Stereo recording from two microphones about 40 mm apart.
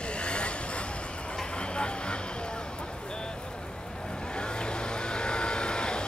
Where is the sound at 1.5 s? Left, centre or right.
Left.